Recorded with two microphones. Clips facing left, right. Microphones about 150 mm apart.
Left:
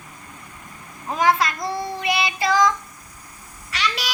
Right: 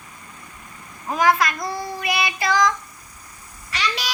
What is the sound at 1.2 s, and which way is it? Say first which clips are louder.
Child singing: right 1 dB; 25° left (ahead or behind).